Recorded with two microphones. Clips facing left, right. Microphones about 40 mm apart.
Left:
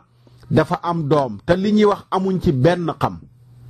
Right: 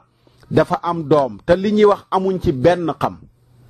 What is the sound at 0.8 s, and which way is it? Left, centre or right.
Speech, centre.